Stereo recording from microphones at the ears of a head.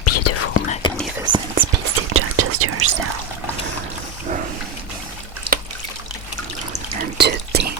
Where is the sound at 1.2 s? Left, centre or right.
Right.